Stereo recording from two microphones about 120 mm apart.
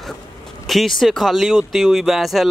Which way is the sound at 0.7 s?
Centre (ahead or behind).